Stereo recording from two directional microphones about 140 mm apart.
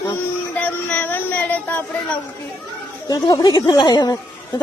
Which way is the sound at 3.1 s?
25° left (ahead or behind).